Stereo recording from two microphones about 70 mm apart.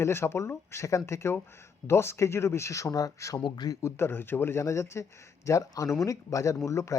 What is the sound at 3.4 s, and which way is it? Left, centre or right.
Speech, left.